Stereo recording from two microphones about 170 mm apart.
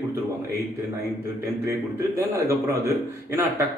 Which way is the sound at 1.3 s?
15° right (ahead or behind).